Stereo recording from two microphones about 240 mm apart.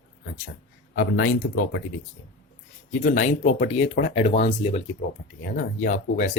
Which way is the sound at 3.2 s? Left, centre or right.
Left.